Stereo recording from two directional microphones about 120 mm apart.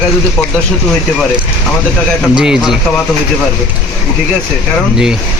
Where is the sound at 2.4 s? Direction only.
5° right (ahead or behind).